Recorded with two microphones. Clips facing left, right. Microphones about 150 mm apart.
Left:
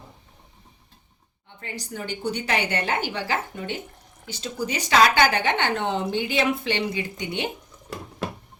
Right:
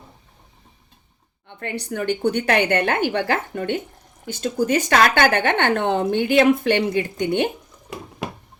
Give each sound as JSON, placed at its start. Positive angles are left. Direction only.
{"t": 1.5, "sound": "a woman's voice", "side_deg": -65}